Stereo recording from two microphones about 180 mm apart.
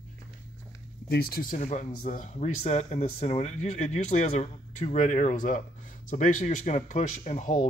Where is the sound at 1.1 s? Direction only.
60° left (ahead or behind).